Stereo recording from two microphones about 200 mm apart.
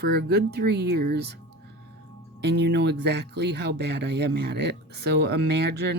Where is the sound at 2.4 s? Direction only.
55° right (ahead or behind).